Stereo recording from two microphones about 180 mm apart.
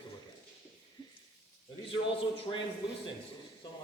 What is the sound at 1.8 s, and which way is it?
Speech, 30° left (ahead or behind).